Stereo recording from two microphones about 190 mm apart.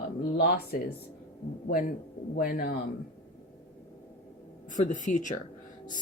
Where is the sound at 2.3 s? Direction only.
50° left (ahead or behind).